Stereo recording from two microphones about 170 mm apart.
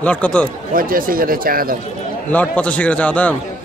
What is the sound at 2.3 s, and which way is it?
A man's voice, 10° left (ahead or behind).